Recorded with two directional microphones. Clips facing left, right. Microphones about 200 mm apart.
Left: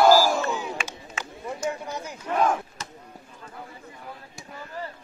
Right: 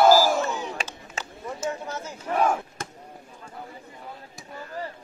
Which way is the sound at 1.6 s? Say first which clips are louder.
Even; 15° left (ahead or behind).